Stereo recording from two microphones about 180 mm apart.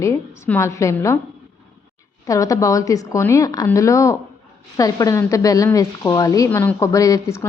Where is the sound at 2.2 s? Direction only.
20° left (ahead or behind).